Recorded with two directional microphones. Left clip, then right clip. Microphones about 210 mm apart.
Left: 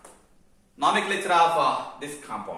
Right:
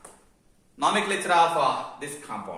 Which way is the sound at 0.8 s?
20° right (ahead or behind).